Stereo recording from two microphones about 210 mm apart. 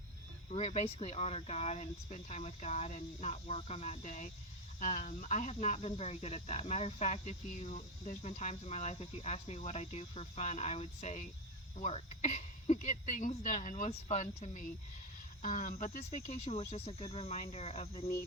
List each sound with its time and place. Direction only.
0.5 s speech: 30° left (ahead or behind)